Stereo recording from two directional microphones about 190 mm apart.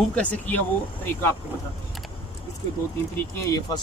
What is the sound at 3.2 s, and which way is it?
Speech, 15° left (ahead or behind).